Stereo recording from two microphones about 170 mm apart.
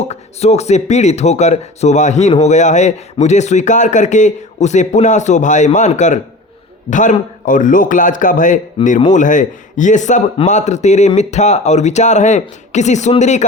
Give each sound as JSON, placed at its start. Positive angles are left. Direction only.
{"t": 0.0, "sound": "speech", "side_deg": 40}